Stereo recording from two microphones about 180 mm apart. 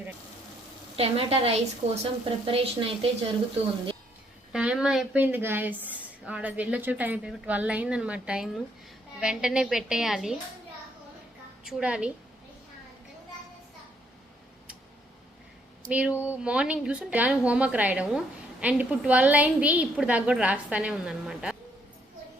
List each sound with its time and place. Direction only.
0.9 s speech: 35° right (ahead or behind)
4.5 s a woman's voice: 5° right (ahead or behind)
11.6 s a woman's voice: 5° right (ahead or behind)
15.9 s a woman's voice: 5° right (ahead or behind)